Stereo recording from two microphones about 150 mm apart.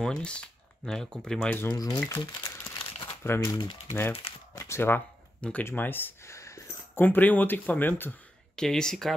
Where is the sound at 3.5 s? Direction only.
35° left (ahead or behind).